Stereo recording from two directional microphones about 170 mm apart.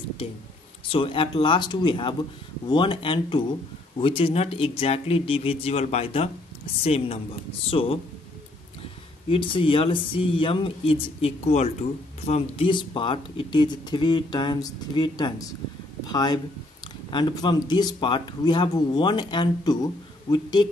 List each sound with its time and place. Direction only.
0.8 s speech: 30° left (ahead or behind)
9.3 s speech: 30° left (ahead or behind)